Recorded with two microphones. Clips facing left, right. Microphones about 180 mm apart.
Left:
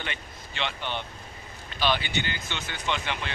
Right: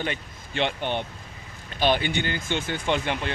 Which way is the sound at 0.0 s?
45° right (ahead or behind).